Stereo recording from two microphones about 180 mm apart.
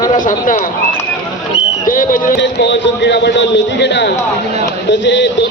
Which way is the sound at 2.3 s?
75° left (ahead or behind).